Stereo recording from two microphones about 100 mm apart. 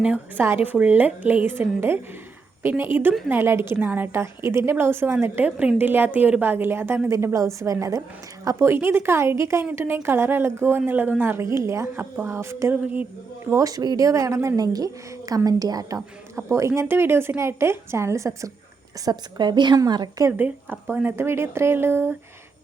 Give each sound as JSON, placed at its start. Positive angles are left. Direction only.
{"t": 0.0, "sound": "a woman's voice", "side_deg": -10}
{"t": 13.5, "sound": "a woman's voice", "side_deg": -35}
{"t": 19.0, "sound": "a woman's voice", "side_deg": -45}
{"t": 20.3, "sound": "a woman's voice", "side_deg": -15}